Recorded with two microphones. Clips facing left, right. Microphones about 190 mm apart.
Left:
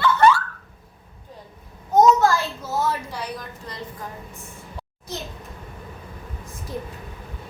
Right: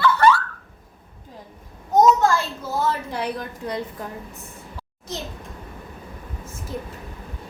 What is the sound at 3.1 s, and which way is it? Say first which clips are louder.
Speech: right 5 dB; 55° right (ahead or behind).